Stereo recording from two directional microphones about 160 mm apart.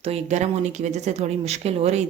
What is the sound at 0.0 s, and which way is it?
Speech, 45° right (ahead or behind).